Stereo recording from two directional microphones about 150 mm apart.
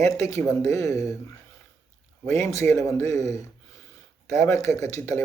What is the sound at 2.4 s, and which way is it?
Speech, 20° left (ahead or behind).